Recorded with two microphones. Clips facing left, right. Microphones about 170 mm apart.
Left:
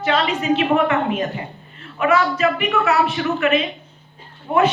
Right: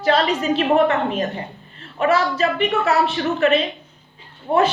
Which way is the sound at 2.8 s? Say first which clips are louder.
Even; 40° right (ahead or behind).